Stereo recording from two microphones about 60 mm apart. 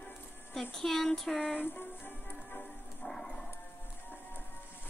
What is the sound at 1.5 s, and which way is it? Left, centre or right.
Music, left.